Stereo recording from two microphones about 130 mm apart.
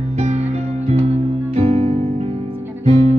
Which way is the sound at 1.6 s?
50° right (ahead or behind).